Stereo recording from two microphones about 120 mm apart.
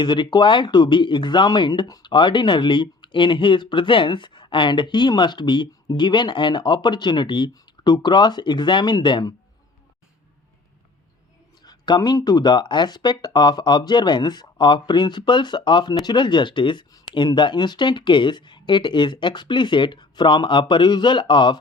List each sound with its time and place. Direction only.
0.0 s speech: 40° left (ahead or behind)
11.6 s speech: 35° left (ahead or behind)